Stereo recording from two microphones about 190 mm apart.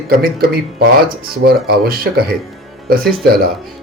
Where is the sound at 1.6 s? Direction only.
55° right (ahead or behind).